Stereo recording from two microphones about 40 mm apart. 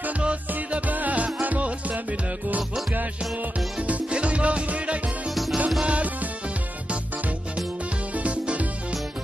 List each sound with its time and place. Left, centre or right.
0.7 s music: right
3.8 s music: right
5.3 s music: centre
5.9 s music: right
8.2 s music: right